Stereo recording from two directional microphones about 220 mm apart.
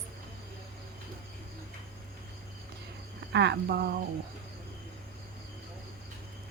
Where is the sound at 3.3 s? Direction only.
50° right (ahead or behind).